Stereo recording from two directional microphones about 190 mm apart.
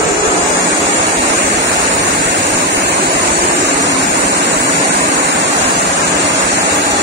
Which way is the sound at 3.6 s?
65° right (ahead or behind).